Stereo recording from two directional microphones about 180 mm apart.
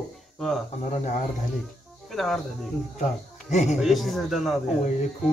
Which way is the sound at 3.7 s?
Centre (ahead or behind).